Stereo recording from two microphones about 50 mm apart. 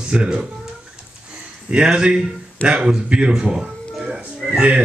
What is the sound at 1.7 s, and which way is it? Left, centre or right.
A man's voice, centre.